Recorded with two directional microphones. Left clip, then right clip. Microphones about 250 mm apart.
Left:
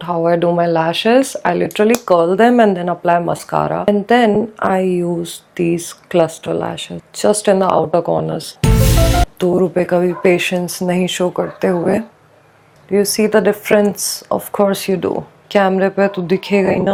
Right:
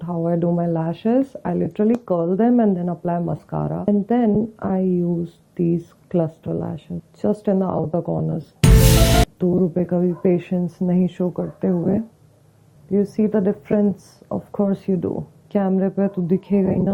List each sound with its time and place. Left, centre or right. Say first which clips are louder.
0.3 s speech: left 8 dB; centre
8.2 s music: left 4 dB; centre
9.5 s speech: left 6 dB; left
9.7 s speech: left 7 dB; centre